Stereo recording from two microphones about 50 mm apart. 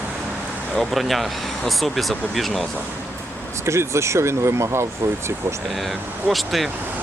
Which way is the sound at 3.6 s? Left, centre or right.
Right.